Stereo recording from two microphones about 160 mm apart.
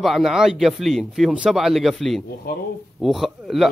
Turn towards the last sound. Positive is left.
turn(degrees=0)  # may be behind; listen again after turning